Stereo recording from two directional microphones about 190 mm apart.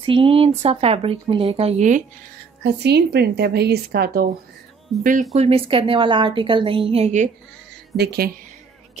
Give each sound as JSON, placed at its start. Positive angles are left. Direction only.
{"t": 0.0, "sound": "speech", "side_deg": -30}
{"t": 2.6, "sound": "a woman's voice", "side_deg": -60}
{"t": 4.9, "sound": "speech", "side_deg": 0}
{"t": 5.3, "sound": "a woman's voice", "side_deg": -35}
{"t": 7.9, "sound": "a woman's voice", "side_deg": -55}